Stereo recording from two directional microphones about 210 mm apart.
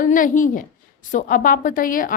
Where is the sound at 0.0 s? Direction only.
40° left (ahead or behind).